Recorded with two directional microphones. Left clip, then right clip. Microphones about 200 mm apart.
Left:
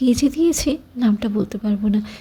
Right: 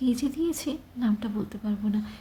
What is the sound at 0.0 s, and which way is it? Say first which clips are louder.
A woman's voice: left 10 dB; 35° left (ahead or behind).